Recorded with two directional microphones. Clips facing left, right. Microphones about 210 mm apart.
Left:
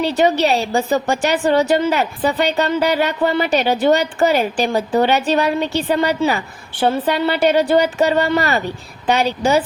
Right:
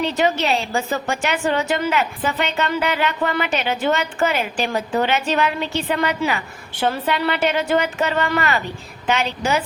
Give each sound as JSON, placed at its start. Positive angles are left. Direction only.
{"t": 0.0, "sound": "a woman's voice", "side_deg": 35}